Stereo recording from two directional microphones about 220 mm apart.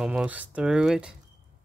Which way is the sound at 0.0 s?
5° right (ahead or behind).